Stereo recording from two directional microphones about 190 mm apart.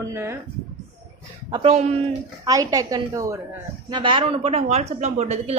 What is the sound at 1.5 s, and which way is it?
Speech, 30° right (ahead or behind).